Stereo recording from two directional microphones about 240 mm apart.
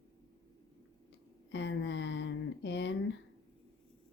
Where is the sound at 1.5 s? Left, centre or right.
Left.